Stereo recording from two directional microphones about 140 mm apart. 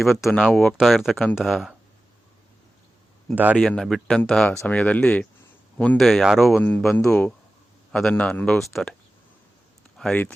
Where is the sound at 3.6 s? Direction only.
5° left (ahead or behind).